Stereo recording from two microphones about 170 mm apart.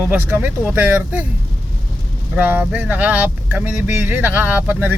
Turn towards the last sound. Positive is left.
turn(degrees=-10)  # may be behind; listen again after turning